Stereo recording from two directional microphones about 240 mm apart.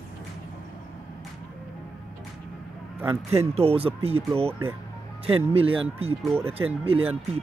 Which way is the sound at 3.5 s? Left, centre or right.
Right.